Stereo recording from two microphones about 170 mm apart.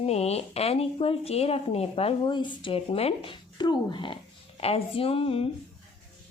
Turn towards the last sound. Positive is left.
turn(degrees=35)  # may be behind; listen again after turning